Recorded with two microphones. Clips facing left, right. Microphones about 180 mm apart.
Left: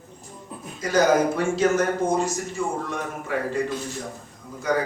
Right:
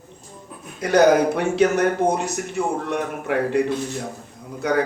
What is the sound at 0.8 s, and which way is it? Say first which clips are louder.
Speech: right 4 dB; 65° right (ahead or behind).